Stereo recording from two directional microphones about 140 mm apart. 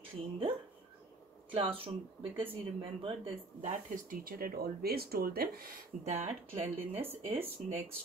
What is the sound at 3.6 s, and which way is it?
Speech, 70° right (ahead or behind).